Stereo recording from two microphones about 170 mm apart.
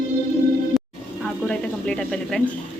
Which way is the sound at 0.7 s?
Centre (ahead or behind).